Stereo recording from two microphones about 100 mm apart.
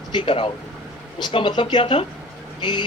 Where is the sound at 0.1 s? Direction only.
55° left (ahead or behind).